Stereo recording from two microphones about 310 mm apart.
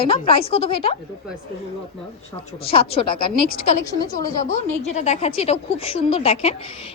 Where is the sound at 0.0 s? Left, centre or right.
Centre.